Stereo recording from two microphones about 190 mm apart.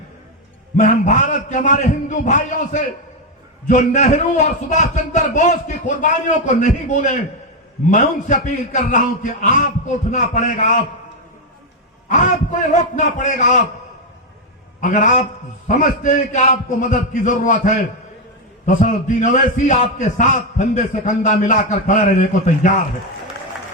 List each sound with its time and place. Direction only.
0.8 s a man's voice: 40° left (ahead or behind)
12.0 s a man's voice: 40° left (ahead or behind)
14.8 s a man's voice: 40° left (ahead or behind)